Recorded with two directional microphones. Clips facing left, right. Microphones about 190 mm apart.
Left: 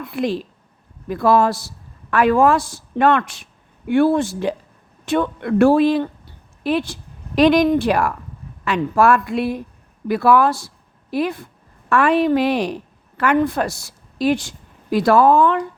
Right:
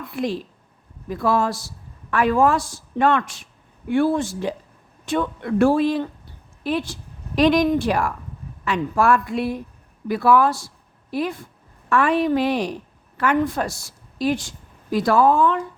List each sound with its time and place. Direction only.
0.1 s a man's voice: 70° left (ahead or behind)